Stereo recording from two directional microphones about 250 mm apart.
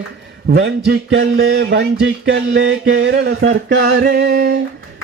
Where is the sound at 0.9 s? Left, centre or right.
Right.